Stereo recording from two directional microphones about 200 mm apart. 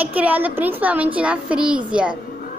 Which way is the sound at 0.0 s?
10° right (ahead or behind).